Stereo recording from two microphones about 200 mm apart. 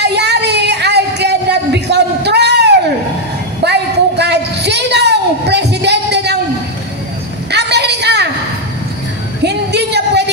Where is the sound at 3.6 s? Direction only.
55° right (ahead or behind).